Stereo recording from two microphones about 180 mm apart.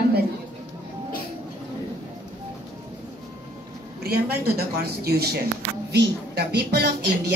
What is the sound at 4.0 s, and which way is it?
A woman's voice, 60° right (ahead or behind).